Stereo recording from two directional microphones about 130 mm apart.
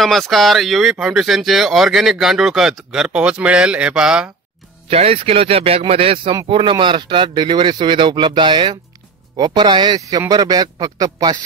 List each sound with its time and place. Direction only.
0.0 s speech: centre (ahead or behind)
4.8 s speech: 50° right (ahead or behind); by 11.3 s 30° right (ahead or behind)